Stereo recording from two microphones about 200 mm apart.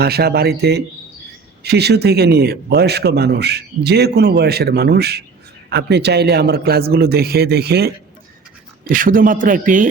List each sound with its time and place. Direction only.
0.0 s a man's voice: 50° right (ahead or behind)